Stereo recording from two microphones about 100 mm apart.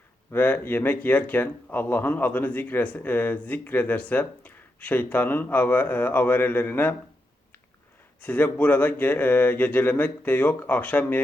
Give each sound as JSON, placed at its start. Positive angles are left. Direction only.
{"t": 0.3, "sound": "speech", "side_deg": 15}
{"t": 8.2, "sound": "speech", "side_deg": 15}